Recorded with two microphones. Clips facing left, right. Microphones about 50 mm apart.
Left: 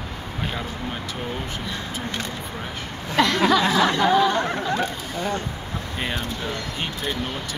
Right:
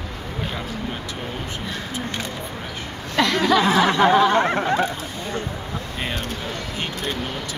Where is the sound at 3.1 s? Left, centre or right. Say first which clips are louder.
Even; centre.